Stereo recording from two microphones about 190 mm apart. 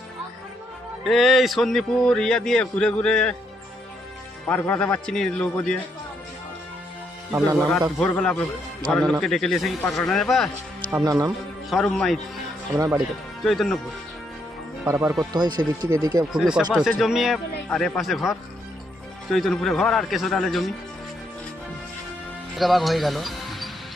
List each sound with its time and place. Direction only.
1.0 s a man's voice: centre (ahead or behind)
4.4 s speech: 10° left (ahead or behind)
7.3 s a man's voice: 15° right (ahead or behind)
7.9 s a man's voice: 5° left (ahead or behind)
10.9 s speech: 20° right (ahead or behind)
11.7 s a man's voice: 5° left (ahead or behind)
12.7 s a man's voice: 15° right (ahead or behind)
13.4 s a man's voice: centre (ahead or behind)
14.8 s a man's voice: 15° right (ahead or behind)
16.3 s a man's voice: 5° right (ahead or behind)
22.5 s speech: centre (ahead or behind)